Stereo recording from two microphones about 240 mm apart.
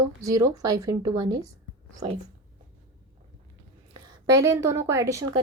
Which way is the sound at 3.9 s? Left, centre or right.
Centre.